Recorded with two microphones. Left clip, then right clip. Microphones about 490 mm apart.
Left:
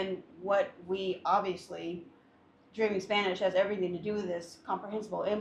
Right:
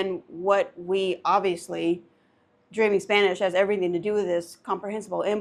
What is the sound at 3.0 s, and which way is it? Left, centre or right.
Speech, right.